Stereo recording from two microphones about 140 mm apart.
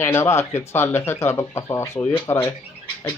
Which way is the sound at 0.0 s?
20° left (ahead or behind).